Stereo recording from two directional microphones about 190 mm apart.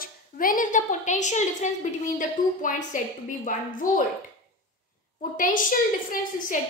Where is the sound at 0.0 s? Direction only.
45° left (ahead or behind).